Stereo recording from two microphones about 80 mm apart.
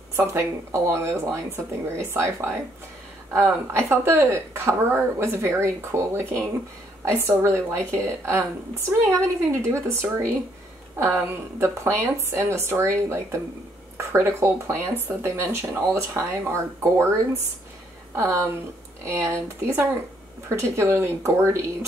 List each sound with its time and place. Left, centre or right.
0.1 s speech: right
18.1 s speech: right